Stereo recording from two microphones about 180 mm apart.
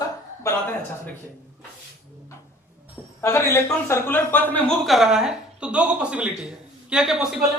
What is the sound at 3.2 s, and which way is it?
A man's voice, 15° left (ahead or behind).